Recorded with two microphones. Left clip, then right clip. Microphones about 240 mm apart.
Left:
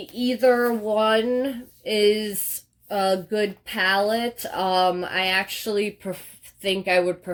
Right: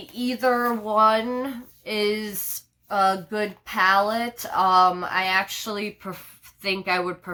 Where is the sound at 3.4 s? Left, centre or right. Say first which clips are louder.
Right 2 dB; centre.